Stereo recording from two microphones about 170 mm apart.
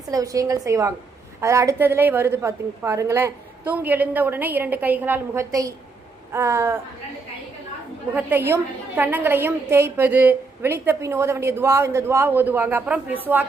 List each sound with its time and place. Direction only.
0.1 s a woman's voice: 20° right (ahead or behind)
8.1 s a woman's voice: 10° right (ahead or behind)